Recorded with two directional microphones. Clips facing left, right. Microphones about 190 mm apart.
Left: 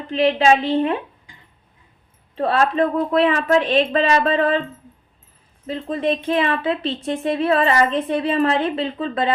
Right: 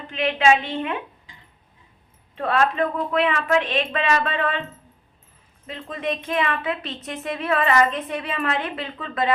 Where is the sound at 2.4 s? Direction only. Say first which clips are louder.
Left 3 dB; 30° left (ahead or behind).